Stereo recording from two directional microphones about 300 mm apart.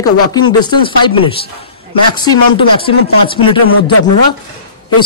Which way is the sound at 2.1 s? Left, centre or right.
Centre.